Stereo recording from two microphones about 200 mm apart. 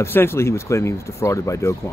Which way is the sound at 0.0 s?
10° left (ahead or behind).